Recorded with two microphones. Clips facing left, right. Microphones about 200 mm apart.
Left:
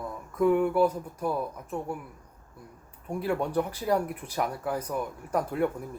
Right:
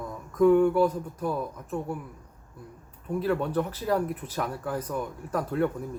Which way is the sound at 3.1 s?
10° left (ahead or behind).